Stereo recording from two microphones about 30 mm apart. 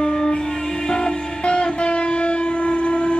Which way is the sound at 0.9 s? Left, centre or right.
Left.